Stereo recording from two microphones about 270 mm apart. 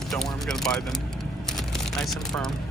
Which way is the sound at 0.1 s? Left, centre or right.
Centre.